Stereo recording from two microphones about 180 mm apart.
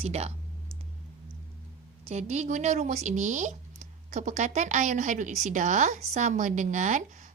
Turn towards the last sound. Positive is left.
turn(degrees=-40)  # may be behind; listen again after turning